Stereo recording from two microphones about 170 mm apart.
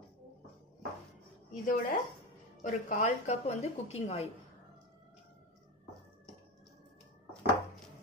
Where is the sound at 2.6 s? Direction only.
50° left (ahead or behind).